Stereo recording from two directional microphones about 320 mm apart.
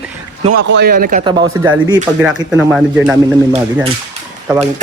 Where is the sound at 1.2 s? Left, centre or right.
Centre.